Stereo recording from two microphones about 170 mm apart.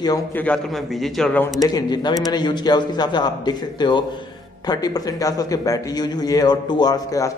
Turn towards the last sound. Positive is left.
turn(degrees=20)  # may be behind; listen again after turning